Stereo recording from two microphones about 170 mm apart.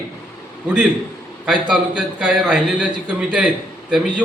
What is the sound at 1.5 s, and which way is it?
A man's voice, 5° right (ahead or behind).